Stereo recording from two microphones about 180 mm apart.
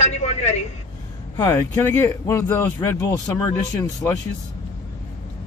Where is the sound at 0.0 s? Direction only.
40° left (ahead or behind).